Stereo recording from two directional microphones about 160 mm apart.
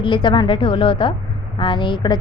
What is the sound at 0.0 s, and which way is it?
A woman's voice, 30° left (ahead or behind).